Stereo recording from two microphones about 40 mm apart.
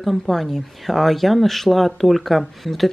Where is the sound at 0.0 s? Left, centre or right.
Centre.